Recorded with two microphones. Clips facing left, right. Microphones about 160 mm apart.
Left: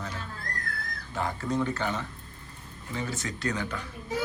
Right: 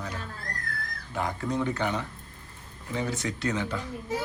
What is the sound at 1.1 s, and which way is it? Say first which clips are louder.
Speech: even; 15° right (ahead or behind).